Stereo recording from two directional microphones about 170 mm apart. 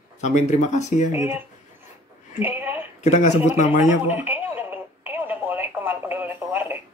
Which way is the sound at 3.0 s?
40° left (ahead or behind).